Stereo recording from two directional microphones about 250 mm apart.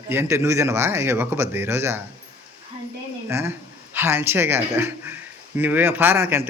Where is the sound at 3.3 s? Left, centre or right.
Centre.